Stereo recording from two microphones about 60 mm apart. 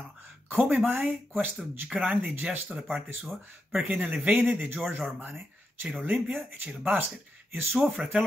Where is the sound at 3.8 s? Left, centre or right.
Right.